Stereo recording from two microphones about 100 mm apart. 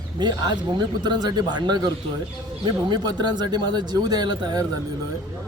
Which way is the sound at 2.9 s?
45° right (ahead or behind).